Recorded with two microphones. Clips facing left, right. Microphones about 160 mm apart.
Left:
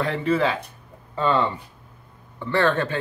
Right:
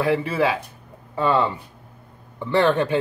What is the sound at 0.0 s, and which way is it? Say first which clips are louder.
Speech: right 1 dB; 10° right (ahead or behind).